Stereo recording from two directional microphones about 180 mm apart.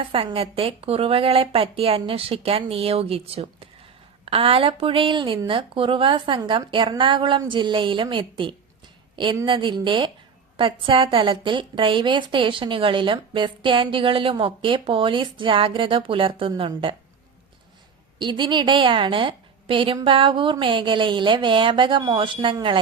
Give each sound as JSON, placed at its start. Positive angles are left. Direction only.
{"t": 0.0, "sound": "a woman's voice", "side_deg": -30}
{"t": 18.2, "sound": "a woman's voice", "side_deg": -25}